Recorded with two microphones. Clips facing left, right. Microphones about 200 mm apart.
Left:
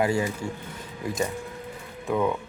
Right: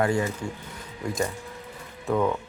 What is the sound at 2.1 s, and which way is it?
Speech, 5° left (ahead or behind).